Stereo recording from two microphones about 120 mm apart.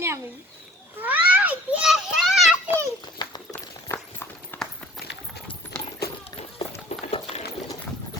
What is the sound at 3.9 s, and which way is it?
Clip-clop, 20° left (ahead or behind).